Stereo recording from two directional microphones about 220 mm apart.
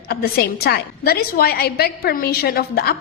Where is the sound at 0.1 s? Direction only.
45° left (ahead or behind).